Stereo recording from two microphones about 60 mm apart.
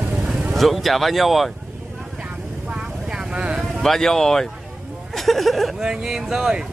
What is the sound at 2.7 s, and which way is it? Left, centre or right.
Vehicle, centre.